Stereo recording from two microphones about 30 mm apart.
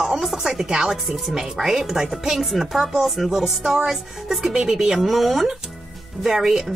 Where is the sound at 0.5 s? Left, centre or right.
Centre.